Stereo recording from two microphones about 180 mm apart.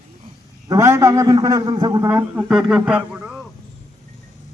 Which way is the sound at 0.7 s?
15° right (ahead or behind).